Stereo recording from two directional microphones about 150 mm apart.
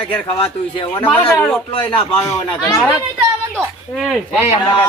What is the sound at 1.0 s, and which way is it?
Speech, 15° left (ahead or behind).